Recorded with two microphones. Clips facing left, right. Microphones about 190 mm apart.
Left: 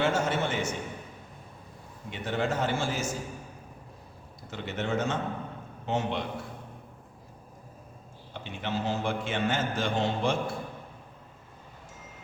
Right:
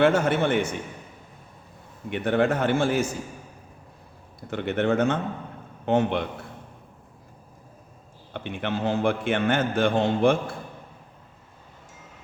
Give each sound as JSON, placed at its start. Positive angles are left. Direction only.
{"t": 0.0, "sound": "a man's voice", "side_deg": -60}
{"t": 2.0, "sound": "a man's voice", "side_deg": -60}
{"t": 4.4, "sound": "a man's voice", "side_deg": -60}
{"t": 8.3, "sound": "a man's voice", "side_deg": -60}